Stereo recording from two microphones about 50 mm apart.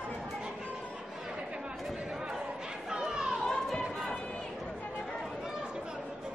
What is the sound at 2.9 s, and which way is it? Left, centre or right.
Chatter, centre.